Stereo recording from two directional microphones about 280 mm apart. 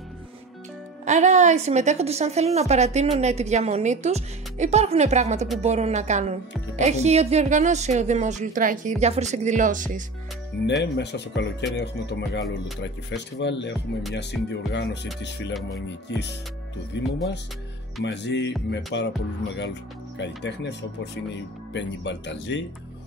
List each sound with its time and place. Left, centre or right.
1.0 s a woman's voice: right
10.7 s speech: left